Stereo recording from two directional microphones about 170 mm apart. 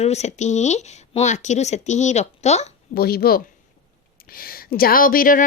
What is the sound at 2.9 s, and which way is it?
Speech, 65° left (ahead or behind).